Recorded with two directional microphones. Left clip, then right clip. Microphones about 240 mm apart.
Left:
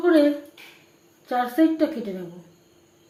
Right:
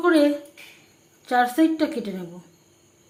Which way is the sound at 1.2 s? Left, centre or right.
Right.